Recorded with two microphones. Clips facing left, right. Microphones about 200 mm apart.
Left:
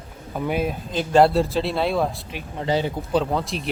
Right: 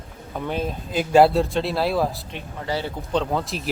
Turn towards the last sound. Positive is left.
turn(degrees=0)  # may be behind; listen again after turning